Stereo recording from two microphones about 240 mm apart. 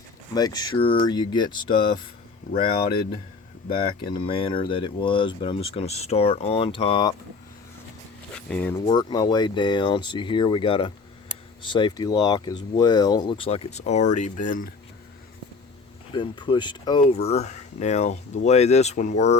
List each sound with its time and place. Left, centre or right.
0.3 s speech: centre
2.6 s speech: left
4.0 s speech: left
8.4 s speech: centre
8.9 s speech: centre
16.1 s speech: centre